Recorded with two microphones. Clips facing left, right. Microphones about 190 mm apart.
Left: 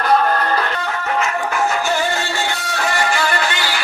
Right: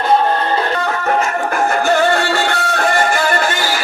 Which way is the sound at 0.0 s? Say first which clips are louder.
Right 2 dB; 25° right (ahead or behind).